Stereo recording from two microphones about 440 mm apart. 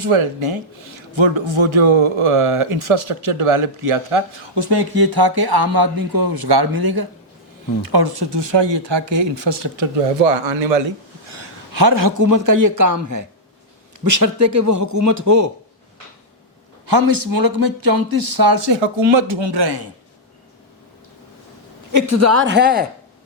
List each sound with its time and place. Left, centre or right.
0.0 s a man's voice: right
11.8 s a man's voice: right
16.8 s a man's voice: right
21.9 s speech: right